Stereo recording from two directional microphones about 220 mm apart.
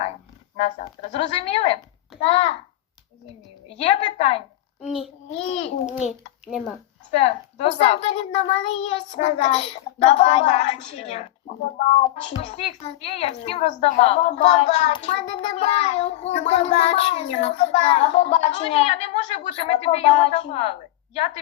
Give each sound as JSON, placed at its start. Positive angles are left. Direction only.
{"t": 0.6, "sound": "speech", "side_deg": 30}
{"t": 3.7, "sound": "a woman's voice", "side_deg": 30}
{"t": 4.9, "sound": "a child's voice", "side_deg": 0}
{"t": 5.3, "sound": "speech", "side_deg": 30}
{"t": 6.1, "sound": "a child's voice", "side_deg": 0}
{"t": 7.1, "sound": "speech", "side_deg": 30}
{"t": 12.3, "sound": "speech", "side_deg": 30}